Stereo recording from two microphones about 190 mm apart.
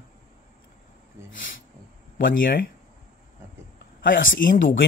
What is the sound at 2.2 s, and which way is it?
Speech, 50° left (ahead or behind).